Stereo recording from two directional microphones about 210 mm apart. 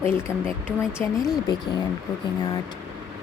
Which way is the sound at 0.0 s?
10° left (ahead or behind).